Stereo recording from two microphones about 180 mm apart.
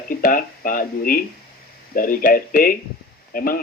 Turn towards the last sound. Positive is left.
turn(degrees=55)  # may be behind; listen again after turning